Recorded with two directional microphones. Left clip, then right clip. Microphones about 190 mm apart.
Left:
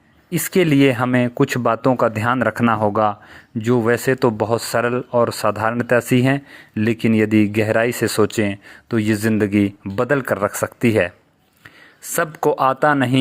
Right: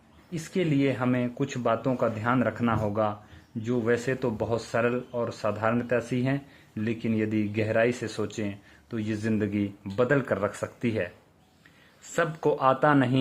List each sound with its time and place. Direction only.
0.3 s speech: 35° left (ahead or behind)
12.1 s speech: 25° left (ahead or behind)